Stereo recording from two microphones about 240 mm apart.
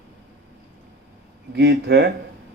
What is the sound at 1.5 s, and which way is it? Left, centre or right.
Speech, right.